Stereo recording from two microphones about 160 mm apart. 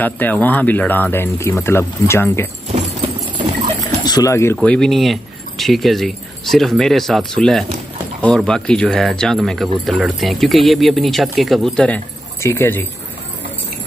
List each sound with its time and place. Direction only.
0.0 s speech: 10° left (ahead or behind)
3.8 s dog: 25° left (ahead or behind)
4.6 s speech: 5° left (ahead or behind)